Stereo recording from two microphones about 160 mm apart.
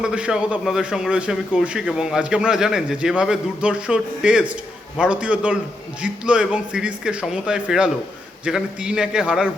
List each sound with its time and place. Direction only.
0.0 s a man's voice: 5° right (ahead or behind)